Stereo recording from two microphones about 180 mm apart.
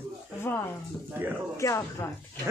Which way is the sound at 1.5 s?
15° left (ahead or behind).